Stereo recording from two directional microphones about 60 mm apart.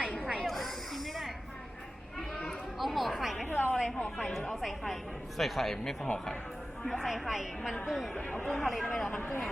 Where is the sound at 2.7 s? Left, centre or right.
Centre.